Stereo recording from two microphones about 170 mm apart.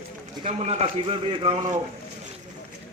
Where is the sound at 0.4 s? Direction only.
40° right (ahead or behind).